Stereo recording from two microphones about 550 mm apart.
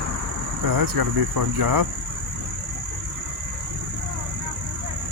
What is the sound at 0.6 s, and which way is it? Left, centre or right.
Speech, right.